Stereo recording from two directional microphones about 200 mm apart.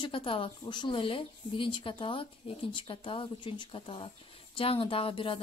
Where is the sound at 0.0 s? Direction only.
25° left (ahead or behind).